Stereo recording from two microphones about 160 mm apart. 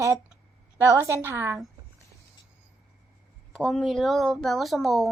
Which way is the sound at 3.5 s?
5° left (ahead or behind).